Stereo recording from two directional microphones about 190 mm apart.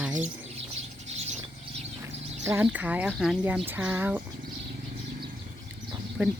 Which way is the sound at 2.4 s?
10° right (ahead or behind).